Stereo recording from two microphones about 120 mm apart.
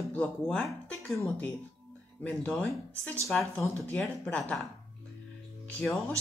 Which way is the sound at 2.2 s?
10° left (ahead or behind).